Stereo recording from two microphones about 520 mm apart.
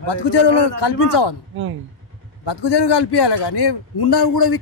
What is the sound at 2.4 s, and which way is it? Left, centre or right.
A man's voice, left.